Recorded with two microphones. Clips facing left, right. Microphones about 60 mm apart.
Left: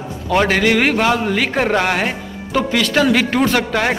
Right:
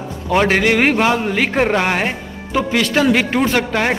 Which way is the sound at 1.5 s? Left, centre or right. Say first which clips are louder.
Right 1 dB; centre.